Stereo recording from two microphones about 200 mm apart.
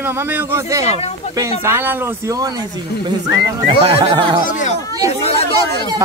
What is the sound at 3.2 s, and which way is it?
Music, 20° right (ahead or behind).